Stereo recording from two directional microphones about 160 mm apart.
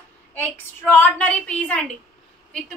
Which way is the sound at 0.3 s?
10° left (ahead or behind).